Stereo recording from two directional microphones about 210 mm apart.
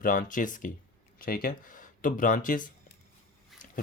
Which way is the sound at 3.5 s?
Centre (ahead or behind).